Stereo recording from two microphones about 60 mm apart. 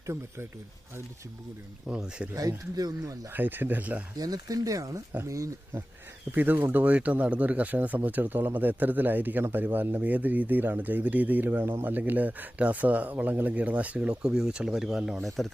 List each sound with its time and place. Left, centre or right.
1.9 s speech: centre
2.3 s speech: right
3.3 s speech: right
4.2 s speech: right
5.2 s speech: right
6.3 s speech: right; by 15.3 s centre